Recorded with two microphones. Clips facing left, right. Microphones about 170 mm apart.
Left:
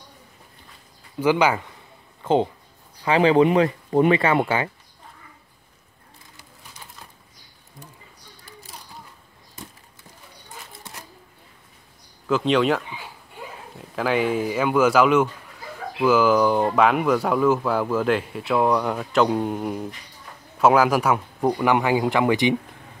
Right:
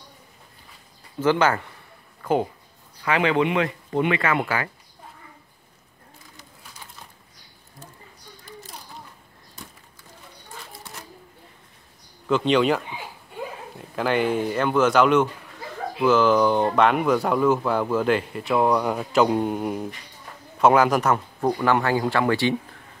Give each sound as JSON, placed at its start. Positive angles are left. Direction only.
{"t": 1.2, "sound": "speech", "side_deg": 10}
{"t": 2.2, "sound": "speech", "side_deg": 25}
{"t": 10.7, "sound": "a sound", "side_deg": 20}
{"t": 12.3, "sound": "speech", "side_deg": 0}